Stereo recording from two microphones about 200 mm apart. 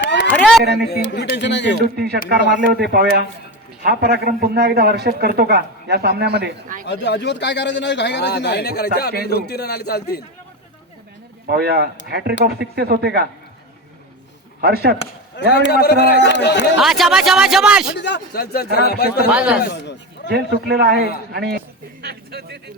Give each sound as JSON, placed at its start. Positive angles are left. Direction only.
{"t": 0.0, "sound": "a sound", "side_deg": 60}
{"t": 0.3, "sound": "a sound", "side_deg": 0}
{"t": 0.9, "sound": "speech", "side_deg": 55}
{"t": 2.3, "sound": "a man's voice", "side_deg": -60}
{"t": 6.8, "sound": "a man's voice", "side_deg": 55}
{"t": 11.4, "sound": "a man's voice", "side_deg": -50}
{"t": 14.6, "sound": "a man's voice", "side_deg": -50}
{"t": 15.5, "sound": "speech", "side_deg": 55}
{"t": 16.7, "sound": "speech", "side_deg": 0}
{"t": 17.9, "sound": "a man's voice", "side_deg": 60}
{"t": 19.3, "sound": "speech", "side_deg": -5}
{"t": 19.6, "sound": "speech", "side_deg": 60}
{"t": 20.3, "sound": "a man's voice", "side_deg": -50}